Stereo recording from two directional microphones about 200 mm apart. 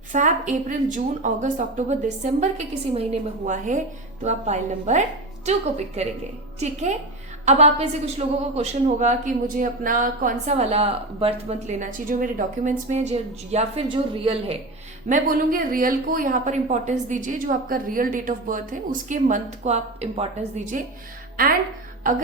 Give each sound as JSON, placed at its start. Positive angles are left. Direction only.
{"t": 0.1, "sound": "a woman's voice", "side_deg": -40}
{"t": 15.1, "sound": "a woman's voice", "side_deg": -45}